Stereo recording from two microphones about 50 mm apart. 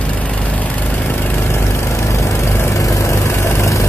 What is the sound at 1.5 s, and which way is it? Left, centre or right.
Vehicle, left.